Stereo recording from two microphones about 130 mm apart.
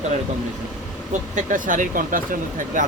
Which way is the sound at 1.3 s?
90° right.